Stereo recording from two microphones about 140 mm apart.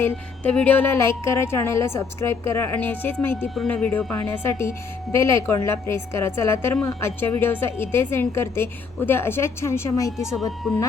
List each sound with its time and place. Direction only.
0.0 s a woman's voice: 10° left (ahead or behind)